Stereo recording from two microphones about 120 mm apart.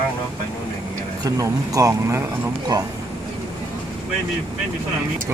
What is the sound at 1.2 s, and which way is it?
Speech, 30° right (ahead or behind).